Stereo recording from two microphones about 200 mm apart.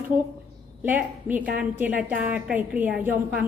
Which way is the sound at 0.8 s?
10° right (ahead or behind).